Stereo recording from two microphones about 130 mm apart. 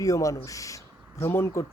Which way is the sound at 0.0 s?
25° left (ahead or behind).